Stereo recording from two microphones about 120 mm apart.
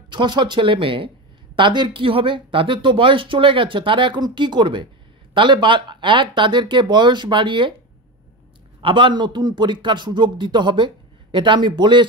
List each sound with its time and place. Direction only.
0.1 s speech: 40° right (ahead or behind)
8.8 s speech: 45° right (ahead or behind)